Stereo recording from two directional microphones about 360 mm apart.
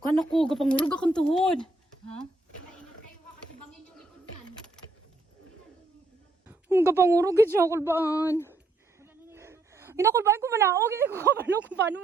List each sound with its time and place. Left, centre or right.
0.1 s speech: centre
6.5 s speech: centre
8.3 s speech: centre
9.0 s a woman's voice: centre